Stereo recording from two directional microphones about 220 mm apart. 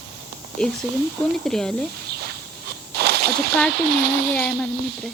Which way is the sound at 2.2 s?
45° right (ahead or behind).